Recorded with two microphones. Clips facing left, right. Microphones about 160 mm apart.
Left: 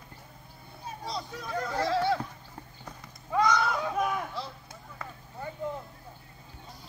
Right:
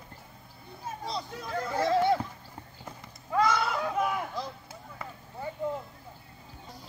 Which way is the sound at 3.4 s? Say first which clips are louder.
Left 1 dB; 5° right (ahead or behind).